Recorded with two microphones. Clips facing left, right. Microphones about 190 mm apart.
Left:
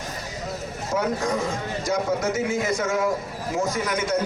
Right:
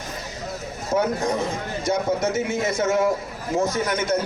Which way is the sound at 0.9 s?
20° right (ahead or behind).